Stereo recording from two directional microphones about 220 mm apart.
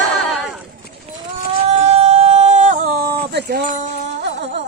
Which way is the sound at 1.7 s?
25° right (ahead or behind).